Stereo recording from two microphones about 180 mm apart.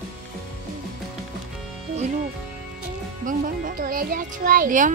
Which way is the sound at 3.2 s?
50° right (ahead or behind).